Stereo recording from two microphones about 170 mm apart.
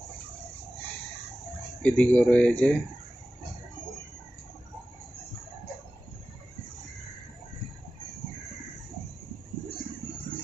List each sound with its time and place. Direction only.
1.8 s speech: 10° left (ahead or behind)